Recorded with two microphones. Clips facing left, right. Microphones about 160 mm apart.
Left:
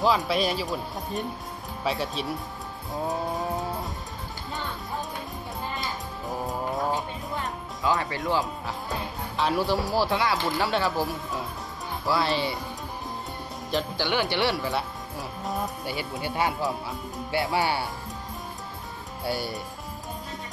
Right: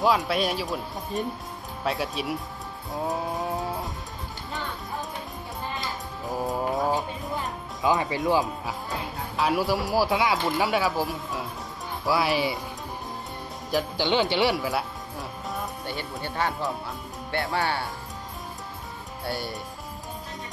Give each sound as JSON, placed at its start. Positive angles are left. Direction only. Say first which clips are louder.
{"t": 0.0, "sound": "speech", "louder": "even", "side_deg": 0}
{"t": 2.9, "sound": "music", "louder": "even", "side_deg": 0}
{"t": 5.8, "sound": "music", "louder": "even", "side_deg": 0}
{"t": 7.8, "sound": "speech", "louder": "right 3 dB", "side_deg": -20}
{"t": 9.4, "sound": "speech", "louder": "even", "side_deg": -5}
{"t": 12.1, "sound": "speech", "louder": "right 2 dB", "side_deg": -10}
{"t": 13.9, "sound": "speech", "louder": "right 4 dB", "side_deg": -20}
{"t": 14.6, "sound": "music", "louder": "right 1 dB", "side_deg": 0}
{"t": 17.3, "sound": "speech", "louder": "left 2 dB", "side_deg": 5}
{"t": 19.2, "sound": "speech", "louder": "left 2 dB", "side_deg": 0}